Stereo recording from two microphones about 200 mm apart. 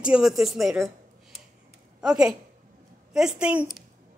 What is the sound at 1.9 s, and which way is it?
Speech, 5° right (ahead or behind).